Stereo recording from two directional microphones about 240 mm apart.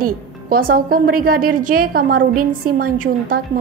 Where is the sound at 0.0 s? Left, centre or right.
Right.